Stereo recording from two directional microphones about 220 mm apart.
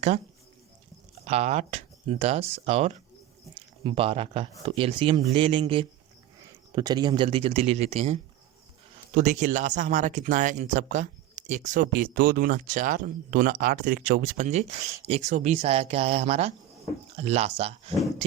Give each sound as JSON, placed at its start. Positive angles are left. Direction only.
{"t": 1.3, "sound": "speech", "side_deg": -30}
{"t": 9.1, "sound": "speech", "side_deg": -35}